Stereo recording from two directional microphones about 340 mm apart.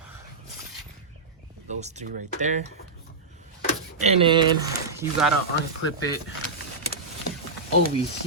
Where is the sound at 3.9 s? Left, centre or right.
Centre.